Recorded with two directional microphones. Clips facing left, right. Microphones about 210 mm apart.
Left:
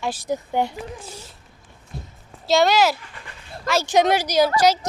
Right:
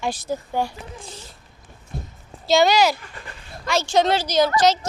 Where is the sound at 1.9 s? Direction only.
50° right (ahead or behind).